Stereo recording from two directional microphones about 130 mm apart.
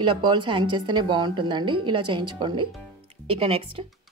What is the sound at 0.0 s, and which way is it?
A woman's voice, 35° right (ahead or behind).